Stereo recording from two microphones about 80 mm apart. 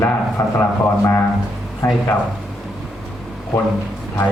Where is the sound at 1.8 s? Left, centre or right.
Left.